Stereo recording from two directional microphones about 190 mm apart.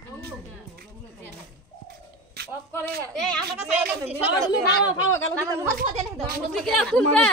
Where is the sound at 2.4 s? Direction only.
55° right (ahead or behind).